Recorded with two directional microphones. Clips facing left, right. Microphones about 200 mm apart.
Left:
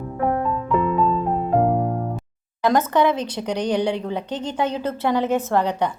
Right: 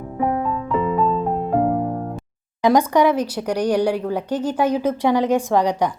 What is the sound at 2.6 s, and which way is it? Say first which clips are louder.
A woman's voice: right 3 dB; 10° right (ahead or behind).